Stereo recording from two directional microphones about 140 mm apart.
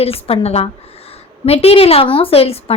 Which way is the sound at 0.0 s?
45° left (ahead or behind).